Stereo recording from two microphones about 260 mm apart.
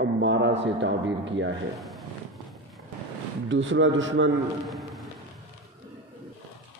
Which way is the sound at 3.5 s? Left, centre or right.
Right.